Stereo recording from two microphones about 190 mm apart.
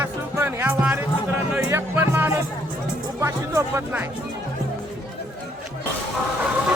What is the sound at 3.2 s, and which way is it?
Speech, 15° right (ahead or behind).